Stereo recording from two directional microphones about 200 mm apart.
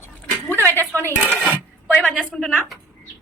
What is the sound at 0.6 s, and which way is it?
Dishes, 10° left (ahead or behind).